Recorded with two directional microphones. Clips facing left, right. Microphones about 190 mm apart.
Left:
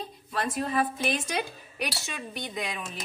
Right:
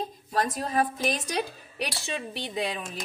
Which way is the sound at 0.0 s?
40° right (ahead or behind).